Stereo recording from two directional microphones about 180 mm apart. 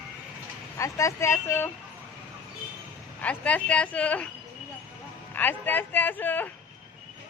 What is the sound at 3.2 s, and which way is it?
Speech, 5° left (ahead or behind).